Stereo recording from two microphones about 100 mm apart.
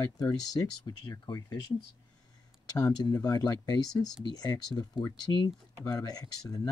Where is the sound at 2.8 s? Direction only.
40° left (ahead or behind).